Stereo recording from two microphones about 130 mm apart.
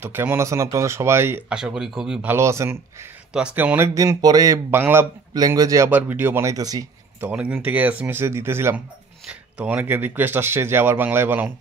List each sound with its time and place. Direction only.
0.0 s speech: 15° right (ahead or behind)
1.5 s speech: 5° right (ahead or behind)
2.3 s speech: 20° right (ahead or behind)
3.3 s speech: 10° right (ahead or behind); by 4.6 s 30° right (ahead or behind)
4.6 s speech: 15° right (ahead or behind)
5.3 s speech: 30° right (ahead or behind)
5.9 s speech: 15° right (ahead or behind)
7.2 s speech: 10° right (ahead or behind)